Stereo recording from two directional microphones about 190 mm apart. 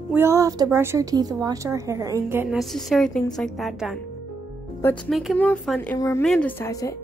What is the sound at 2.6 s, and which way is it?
A woman's voice, centre (ahead or behind).